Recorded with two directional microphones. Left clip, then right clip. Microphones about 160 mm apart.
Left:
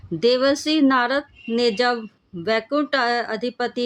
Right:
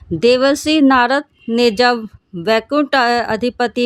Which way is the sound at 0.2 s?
50° right (ahead or behind).